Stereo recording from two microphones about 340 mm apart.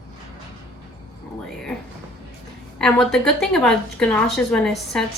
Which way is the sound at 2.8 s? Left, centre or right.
Centre.